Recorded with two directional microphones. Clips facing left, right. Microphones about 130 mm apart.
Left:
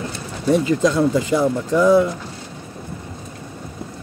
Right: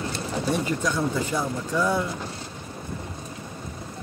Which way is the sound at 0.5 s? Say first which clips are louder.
Left 11 dB; 90° left.